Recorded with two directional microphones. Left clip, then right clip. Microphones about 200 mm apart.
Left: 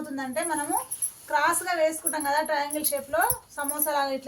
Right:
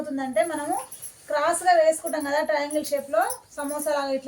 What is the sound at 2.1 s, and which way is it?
A woman's voice, 15° left (ahead or behind).